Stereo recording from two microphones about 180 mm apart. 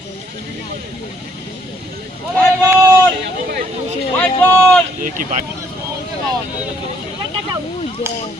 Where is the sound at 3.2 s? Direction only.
55° right (ahead or behind).